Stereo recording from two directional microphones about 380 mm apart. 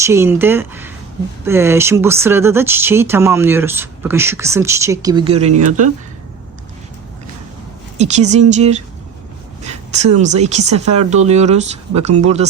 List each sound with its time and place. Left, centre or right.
0.0 s speech: centre
7.9 s speech: centre